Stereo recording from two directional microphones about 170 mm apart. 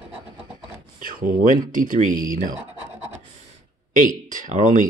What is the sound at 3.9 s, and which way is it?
Speech, 50° right (ahead or behind).